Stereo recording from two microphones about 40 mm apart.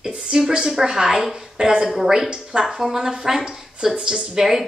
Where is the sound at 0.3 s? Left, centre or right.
Right.